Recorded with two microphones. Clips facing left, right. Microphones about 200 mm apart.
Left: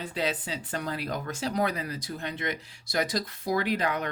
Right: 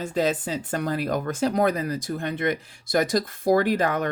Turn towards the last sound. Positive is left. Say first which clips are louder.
# right 6 dB
turn(degrees=-50)  # may be behind; listen again after turning